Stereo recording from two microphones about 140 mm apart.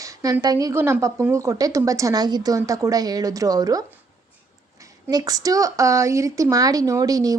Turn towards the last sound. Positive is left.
turn(degrees=-25)  # may be behind; listen again after turning